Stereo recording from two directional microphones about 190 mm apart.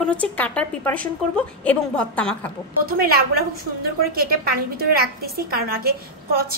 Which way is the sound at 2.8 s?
50° right (ahead or behind).